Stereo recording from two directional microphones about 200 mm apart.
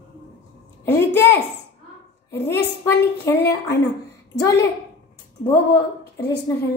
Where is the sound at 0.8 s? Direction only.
10° left (ahead or behind).